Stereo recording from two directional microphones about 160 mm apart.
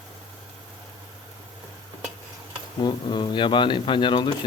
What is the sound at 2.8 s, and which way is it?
Speech, 25° left (ahead or behind).